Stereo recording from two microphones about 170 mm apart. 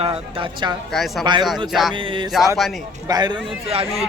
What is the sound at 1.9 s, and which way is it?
Speech, 30° right (ahead or behind).